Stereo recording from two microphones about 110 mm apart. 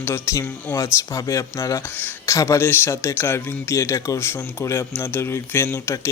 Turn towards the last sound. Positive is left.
turn(degrees=25)  # may be behind; listen again after turning